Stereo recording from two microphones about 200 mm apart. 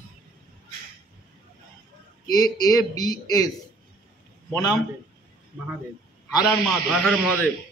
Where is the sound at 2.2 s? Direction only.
20° left (ahead or behind).